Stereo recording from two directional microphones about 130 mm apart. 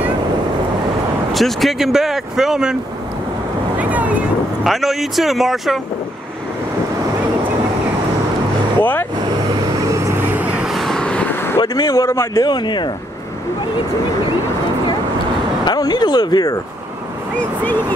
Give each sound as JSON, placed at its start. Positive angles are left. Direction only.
{"t": 1.3, "sound": "speech", "side_deg": 0}
{"t": 3.7, "sound": "vehicle", "side_deg": -10}
{"t": 4.6, "sound": "speech", "side_deg": 0}
{"t": 9.8, "sound": "vehicle", "side_deg": -20}
{"t": 11.6, "sound": "a man's voice", "side_deg": 30}
{"t": 12.4, "sound": "speech", "side_deg": 35}
{"t": 15.6, "sound": "speech", "side_deg": 35}